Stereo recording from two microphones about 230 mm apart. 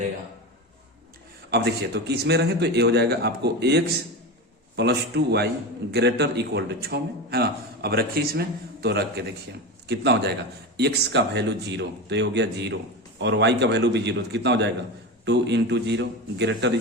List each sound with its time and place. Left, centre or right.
1.5 s a man's voice: right